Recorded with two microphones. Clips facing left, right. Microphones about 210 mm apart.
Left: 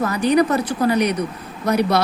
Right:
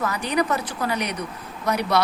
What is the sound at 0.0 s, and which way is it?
Speech, 35° left (ahead or behind).